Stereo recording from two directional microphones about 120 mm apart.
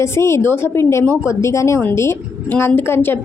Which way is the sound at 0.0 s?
20° left (ahead or behind).